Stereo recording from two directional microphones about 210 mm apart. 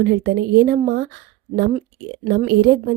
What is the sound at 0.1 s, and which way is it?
Speech, 50° right (ahead or behind).